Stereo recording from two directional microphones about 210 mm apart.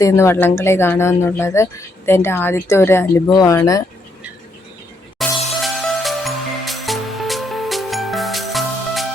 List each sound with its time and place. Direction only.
0.0 s speech: 10° left (ahead or behind)
5.2 s music: centre (ahead or behind)